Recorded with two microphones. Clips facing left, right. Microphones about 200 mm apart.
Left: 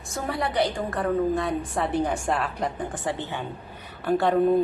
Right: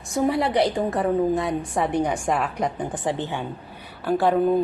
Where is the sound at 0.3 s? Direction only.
20° right (ahead or behind).